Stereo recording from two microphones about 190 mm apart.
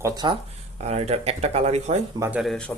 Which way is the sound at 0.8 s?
35° right (ahead or behind).